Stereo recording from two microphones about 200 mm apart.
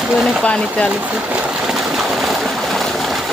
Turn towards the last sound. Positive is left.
turn(degrees=0)  # may be behind; listen again after turning